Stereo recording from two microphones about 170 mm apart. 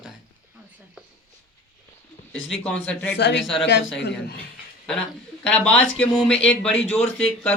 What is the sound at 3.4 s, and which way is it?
Speech, centre (ahead or behind).